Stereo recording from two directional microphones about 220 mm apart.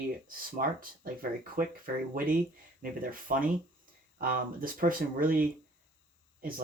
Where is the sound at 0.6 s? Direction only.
40° right (ahead or behind).